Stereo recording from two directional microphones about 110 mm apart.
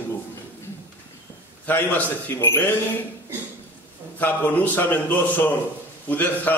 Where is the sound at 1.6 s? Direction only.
15° left (ahead or behind).